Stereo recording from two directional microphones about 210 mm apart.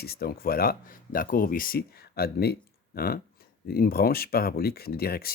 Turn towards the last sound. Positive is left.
turn(degrees=45)  # may be behind; listen again after turning